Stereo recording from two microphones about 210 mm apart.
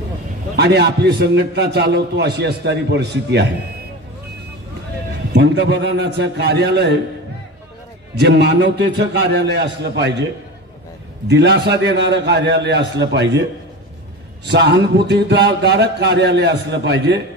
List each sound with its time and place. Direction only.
0.6 s a man's voice: 55° right (ahead or behind)
5.3 s a man's voice: 55° right (ahead or behind)
8.2 s a man's voice: 55° right (ahead or behind)
11.2 s a man's voice: 55° right (ahead or behind)
14.5 s a man's voice: 55° right (ahead or behind)